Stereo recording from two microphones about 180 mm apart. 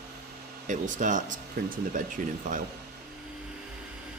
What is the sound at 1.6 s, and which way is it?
Speech, 55° right (ahead or behind).